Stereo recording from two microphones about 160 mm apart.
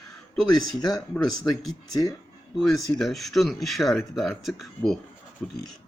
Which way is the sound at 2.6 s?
Centre (ahead or behind).